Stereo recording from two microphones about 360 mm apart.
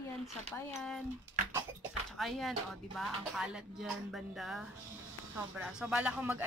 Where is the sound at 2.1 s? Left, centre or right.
Centre.